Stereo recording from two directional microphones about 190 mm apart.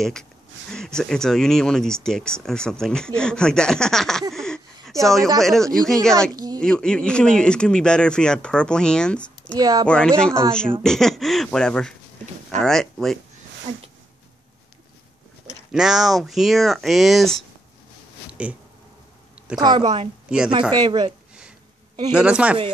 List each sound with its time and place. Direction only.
0.0 s speech: 5° left (ahead or behind)
6.3 s a sound: 20° right (ahead or behind)
6.6 s speech: 5° left (ahead or behind)
9.6 s a woman's voice: 20° right (ahead or behind)
9.8 s speech: 5° left (ahead or behind)
15.7 s speech: 5° right (ahead or behind)
19.6 s a woman's voice: 25° right (ahead or behind)
20.2 s a woman's voice: 5° right (ahead or behind)
20.7 s a woman's voice: 25° right (ahead or behind)
22.1 s speech: 5° right (ahead or behind)